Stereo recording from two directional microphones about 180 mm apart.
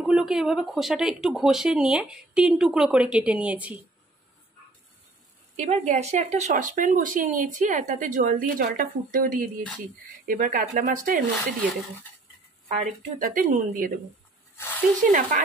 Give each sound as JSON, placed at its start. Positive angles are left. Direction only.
{"t": 0.0, "sound": "speech", "side_deg": -5}
{"t": 5.6, "sound": "speech", "side_deg": -40}
{"t": 12.6, "sound": "speech", "side_deg": -40}
{"t": 14.6, "sound": "speech", "side_deg": 10}
{"t": 15.0, "sound": "speech", "side_deg": -50}